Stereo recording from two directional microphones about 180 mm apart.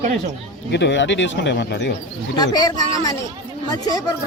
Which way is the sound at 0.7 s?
80° left.